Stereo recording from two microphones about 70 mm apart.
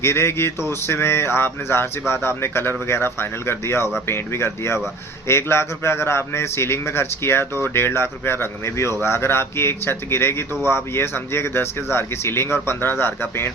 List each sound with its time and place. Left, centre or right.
0.0 s a man's voice: left